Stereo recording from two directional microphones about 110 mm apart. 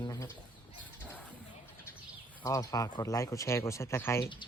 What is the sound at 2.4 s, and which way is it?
Speech, 30° left (ahead or behind).